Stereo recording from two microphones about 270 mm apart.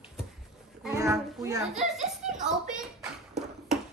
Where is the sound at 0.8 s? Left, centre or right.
Centre.